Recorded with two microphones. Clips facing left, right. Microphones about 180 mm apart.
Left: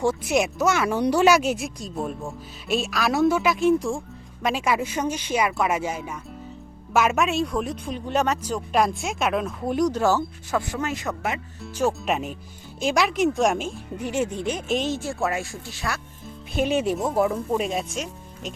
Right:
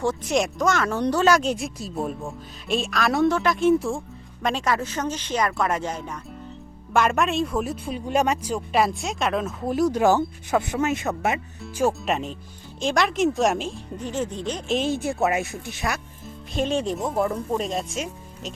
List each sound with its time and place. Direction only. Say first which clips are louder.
0.0 s speech: left 1 dB; 10° left (ahead or behind)
4.4 s speech: left 1 dB; 10° left (ahead or behind); by 11.3 s 25° right (ahead or behind)
12.0 s speech: even; 5° left (ahead or behind)
14.8 s speech: right 2 dB; 15° right (ahead or behind)
16.2 s speech: left 2 dB; 5° left (ahead or behind)